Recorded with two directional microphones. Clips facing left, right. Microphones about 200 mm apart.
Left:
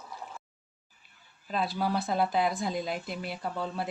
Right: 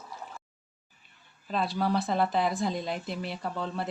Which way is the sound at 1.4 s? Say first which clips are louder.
Right 1 dB; centre (ahead or behind).